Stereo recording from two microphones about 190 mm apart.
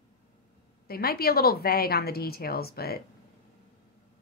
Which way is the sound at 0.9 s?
55° left (ahead or behind).